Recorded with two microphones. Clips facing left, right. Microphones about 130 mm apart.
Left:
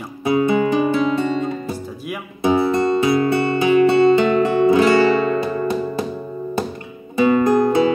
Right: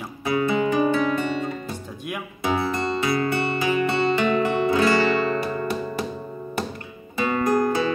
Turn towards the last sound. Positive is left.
turn(degrees=25)  # may be behind; listen again after turning